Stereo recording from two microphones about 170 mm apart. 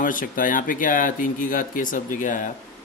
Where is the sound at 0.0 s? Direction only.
55° left (ahead or behind).